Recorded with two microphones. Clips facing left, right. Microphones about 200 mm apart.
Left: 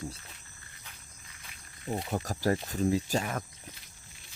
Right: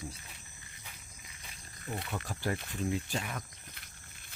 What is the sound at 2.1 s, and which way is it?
Speech, 40° left (ahead or behind).